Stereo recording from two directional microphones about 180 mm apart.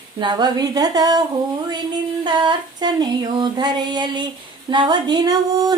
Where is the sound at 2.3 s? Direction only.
25° right (ahead or behind).